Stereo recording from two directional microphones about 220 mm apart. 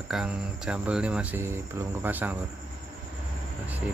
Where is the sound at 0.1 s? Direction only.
5° right (ahead or behind).